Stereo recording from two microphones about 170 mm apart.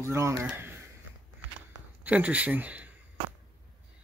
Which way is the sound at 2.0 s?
10° right (ahead or behind).